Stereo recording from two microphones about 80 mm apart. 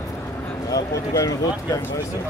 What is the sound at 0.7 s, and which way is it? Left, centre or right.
Speech, left.